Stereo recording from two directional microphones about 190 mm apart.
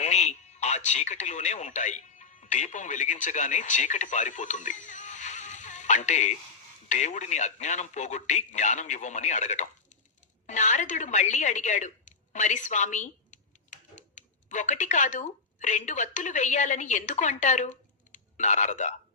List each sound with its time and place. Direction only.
0.0 s a man's voice: 35° left (ahead or behind)